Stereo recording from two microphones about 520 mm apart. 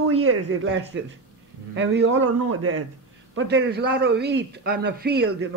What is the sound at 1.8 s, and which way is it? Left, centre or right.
A man's voice, right.